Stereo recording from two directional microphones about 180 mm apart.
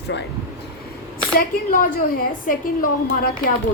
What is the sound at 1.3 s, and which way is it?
A woman's voice, 50° left (ahead or behind).